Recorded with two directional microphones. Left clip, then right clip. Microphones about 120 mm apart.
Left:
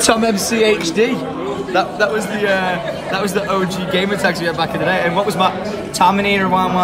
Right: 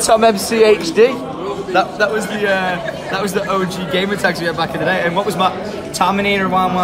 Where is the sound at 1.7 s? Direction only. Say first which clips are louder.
Right 1 dB; 10° left (ahead or behind).